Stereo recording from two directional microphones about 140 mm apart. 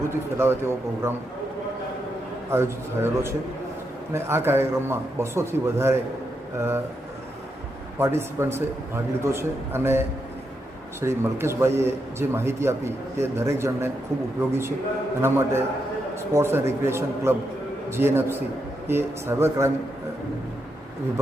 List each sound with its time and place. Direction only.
0.0 s a man's voice: 15° right (ahead or behind)
2.5 s a man's voice: 20° right (ahead or behind)
7.9 s a man's voice: 20° right (ahead or behind)
11.0 s a man's voice: 20° right (ahead or behind)
15.2 s a man's voice: 15° right (ahead or behind)